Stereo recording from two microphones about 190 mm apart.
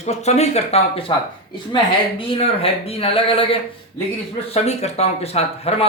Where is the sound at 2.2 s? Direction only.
30° left (ahead or behind).